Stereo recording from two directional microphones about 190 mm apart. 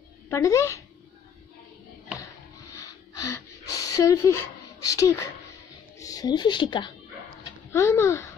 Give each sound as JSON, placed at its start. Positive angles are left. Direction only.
{"t": 0.3, "sound": "speech", "side_deg": 15}
{"t": 2.7, "sound": "a sound", "side_deg": 20}
{"t": 4.8, "sound": "a woman's voice", "side_deg": 20}